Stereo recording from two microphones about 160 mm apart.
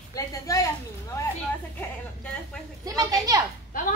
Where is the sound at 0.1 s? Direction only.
20° left (ahead or behind).